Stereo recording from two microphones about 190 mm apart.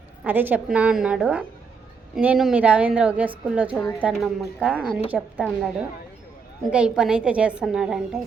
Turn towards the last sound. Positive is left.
turn(degrees=-5)  # may be behind; listen again after turning